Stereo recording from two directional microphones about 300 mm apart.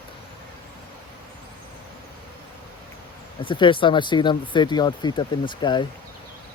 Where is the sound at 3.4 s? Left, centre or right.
Centre.